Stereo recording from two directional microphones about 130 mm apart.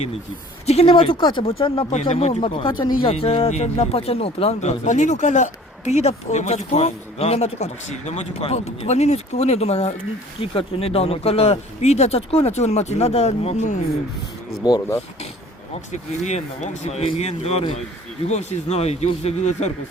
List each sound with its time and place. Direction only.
0.6 s speech: 55° left (ahead or behind)
1.9 s speech: 55° left (ahead or behind)
14.6 s speech: 30° left (ahead or behind)
15.9 s speech: 60° left (ahead or behind)
18.3 s speech: 60° left (ahead or behind)